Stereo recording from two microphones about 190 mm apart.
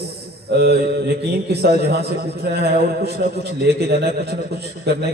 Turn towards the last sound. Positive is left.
turn(degrees=-60)  # may be behind; listen again after turning